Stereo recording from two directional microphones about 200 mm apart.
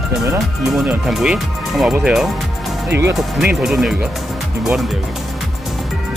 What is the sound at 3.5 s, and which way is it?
Speech, centre (ahead or behind).